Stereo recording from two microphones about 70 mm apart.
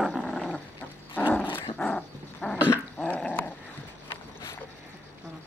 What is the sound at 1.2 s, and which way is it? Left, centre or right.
Dog, left.